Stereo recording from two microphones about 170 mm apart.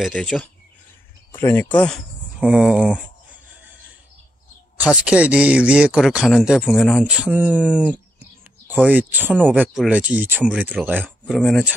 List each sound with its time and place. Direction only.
0.0 s speech: 5° left (ahead or behind)
2.4 s speech: 5° right (ahead or behind)
4.7 s speech: 5° right (ahead or behind); by 7.1 s 10° left (ahead or behind)
7.1 s speech: 5° right (ahead or behind)